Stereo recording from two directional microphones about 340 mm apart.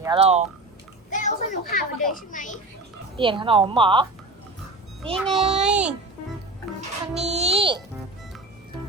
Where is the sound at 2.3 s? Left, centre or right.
Left.